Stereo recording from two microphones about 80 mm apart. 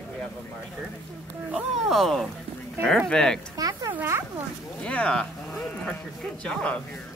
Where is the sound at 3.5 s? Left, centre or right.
Right.